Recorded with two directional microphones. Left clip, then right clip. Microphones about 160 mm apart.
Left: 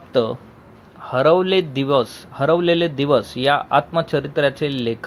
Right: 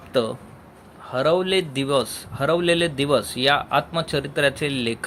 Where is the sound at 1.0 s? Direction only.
30° left (ahead or behind).